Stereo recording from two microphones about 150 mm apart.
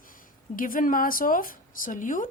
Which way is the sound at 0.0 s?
65° left (ahead or behind).